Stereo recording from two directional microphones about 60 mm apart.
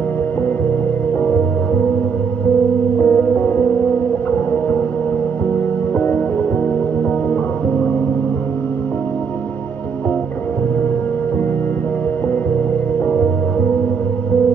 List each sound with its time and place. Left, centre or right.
3.0 s music: left
5.9 s music: left